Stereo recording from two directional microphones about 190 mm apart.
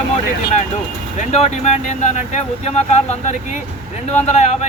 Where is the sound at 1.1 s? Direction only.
35° left (ahead or behind).